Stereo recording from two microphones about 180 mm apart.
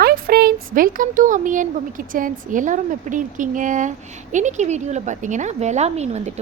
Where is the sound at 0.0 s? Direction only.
55° right (ahead or behind).